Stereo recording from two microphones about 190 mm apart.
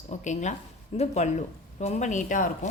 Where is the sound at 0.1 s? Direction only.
40° left (ahead or behind).